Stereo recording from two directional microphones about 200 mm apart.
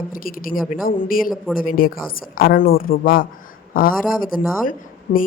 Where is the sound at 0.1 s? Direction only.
45° left (ahead or behind).